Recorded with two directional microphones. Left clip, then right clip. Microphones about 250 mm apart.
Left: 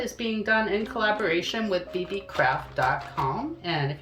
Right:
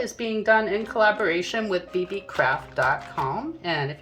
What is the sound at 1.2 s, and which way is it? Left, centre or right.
Speech, right.